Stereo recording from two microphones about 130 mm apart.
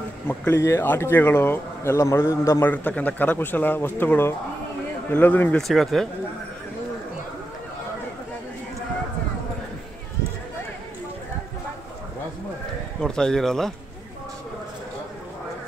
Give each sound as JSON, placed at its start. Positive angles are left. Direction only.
{"t": 0.3, "sound": "speech", "side_deg": 20}
{"t": 13.0, "sound": "speech", "side_deg": 5}